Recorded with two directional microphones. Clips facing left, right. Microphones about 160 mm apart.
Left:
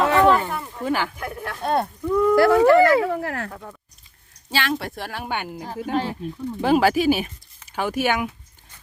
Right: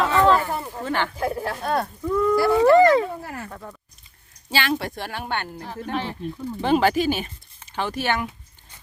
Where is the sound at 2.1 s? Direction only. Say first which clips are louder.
Left 2 dB; 5° left (ahead or behind).